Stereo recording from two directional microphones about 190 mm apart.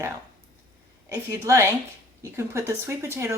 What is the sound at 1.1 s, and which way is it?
Speech, 15° right (ahead or behind).